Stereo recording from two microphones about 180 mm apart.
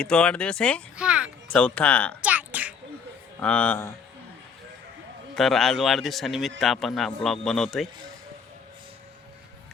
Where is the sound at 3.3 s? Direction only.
5° left (ahead or behind).